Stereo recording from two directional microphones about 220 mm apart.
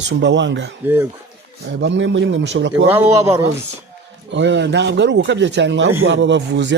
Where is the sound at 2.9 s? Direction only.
10° right (ahead or behind).